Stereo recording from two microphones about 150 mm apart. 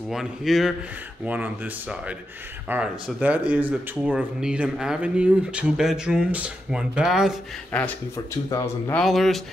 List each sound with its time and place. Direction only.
0.1 s a man's voice: centre (ahead or behind)
7.7 s speech: 5° left (ahead or behind)
8.5 s speech: 25° left (ahead or behind)
8.9 s a man's voice: centre (ahead or behind)